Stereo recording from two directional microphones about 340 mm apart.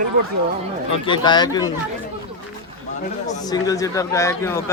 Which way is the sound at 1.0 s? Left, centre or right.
Centre.